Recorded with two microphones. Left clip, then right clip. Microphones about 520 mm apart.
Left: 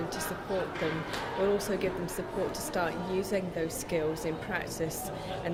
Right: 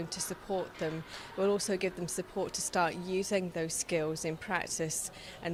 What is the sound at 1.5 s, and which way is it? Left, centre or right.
A woman's voice, right.